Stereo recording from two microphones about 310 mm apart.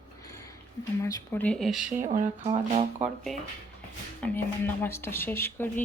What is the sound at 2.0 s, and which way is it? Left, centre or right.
Speech, right.